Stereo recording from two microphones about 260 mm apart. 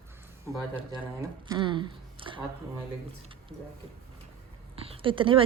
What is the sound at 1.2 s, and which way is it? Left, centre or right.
Speech, centre.